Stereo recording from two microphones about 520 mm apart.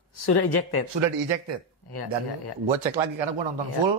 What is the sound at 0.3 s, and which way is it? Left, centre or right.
Speech, left.